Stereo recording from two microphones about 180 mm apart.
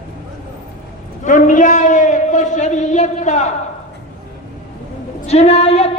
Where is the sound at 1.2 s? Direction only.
45° left (ahead or behind).